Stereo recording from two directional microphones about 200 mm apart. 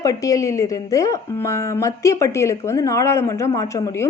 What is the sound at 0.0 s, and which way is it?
A woman's voice, 15° left (ahead or behind).